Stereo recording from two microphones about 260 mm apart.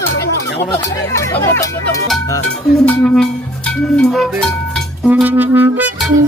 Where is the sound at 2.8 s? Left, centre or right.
Centre.